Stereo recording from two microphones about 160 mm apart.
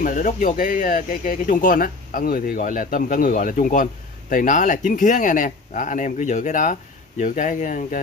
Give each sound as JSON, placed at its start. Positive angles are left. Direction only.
{"t": 0.0, "sound": "speech", "side_deg": 55}